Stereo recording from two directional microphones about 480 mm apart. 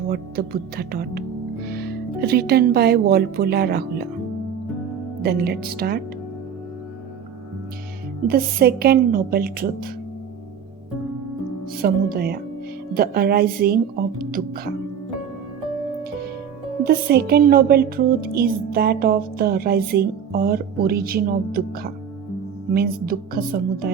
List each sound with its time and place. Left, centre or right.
0.1 s a woman's voice: centre
5.2 s speech: centre
8.3 s speech: centre
11.8 s a woman's voice: centre
16.8 s a woman's voice: centre